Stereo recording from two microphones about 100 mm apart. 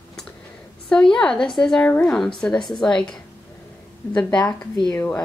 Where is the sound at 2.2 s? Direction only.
5° left (ahead or behind).